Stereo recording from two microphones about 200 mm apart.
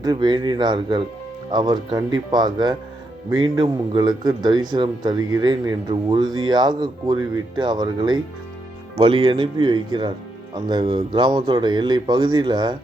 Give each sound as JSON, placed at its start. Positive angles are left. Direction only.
{"t": 0.0, "sound": "a man's voice", "side_deg": -20}